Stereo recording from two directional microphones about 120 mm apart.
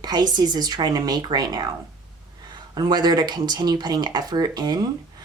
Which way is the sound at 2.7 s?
35° right (ahead or behind).